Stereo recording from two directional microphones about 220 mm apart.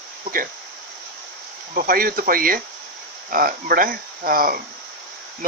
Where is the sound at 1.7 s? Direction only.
40° right (ahead or behind).